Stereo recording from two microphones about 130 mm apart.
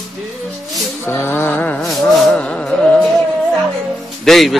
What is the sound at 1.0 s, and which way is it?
Music, 15° left (ahead or behind).